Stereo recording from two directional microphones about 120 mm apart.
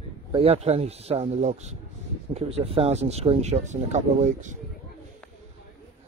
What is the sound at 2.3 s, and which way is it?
Speech, 55° right (ahead or behind).